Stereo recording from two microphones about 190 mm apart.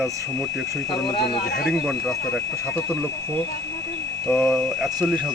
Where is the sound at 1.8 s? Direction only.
Centre (ahead or behind).